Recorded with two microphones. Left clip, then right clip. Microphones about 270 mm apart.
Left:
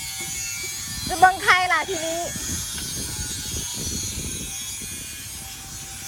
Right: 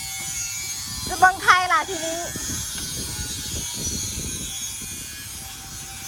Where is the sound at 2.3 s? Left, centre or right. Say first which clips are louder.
Even; right.